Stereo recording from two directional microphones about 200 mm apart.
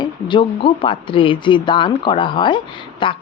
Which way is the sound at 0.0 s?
25° left (ahead or behind).